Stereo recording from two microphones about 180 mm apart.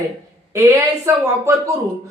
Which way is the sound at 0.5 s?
15° right (ahead or behind).